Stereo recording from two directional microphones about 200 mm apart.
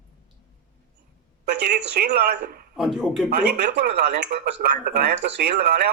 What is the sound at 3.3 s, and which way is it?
A man's voice, 55° right (ahead or behind).